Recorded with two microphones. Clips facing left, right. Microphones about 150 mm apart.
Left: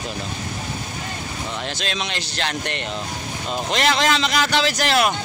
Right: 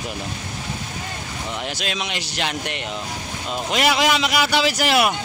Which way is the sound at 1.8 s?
10° right (ahead or behind).